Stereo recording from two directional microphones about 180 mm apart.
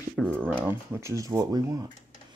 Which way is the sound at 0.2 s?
Centre (ahead or behind).